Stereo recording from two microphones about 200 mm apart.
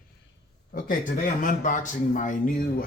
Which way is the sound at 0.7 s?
45° left (ahead or behind).